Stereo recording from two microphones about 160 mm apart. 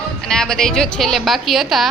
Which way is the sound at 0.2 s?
5° left (ahead or behind).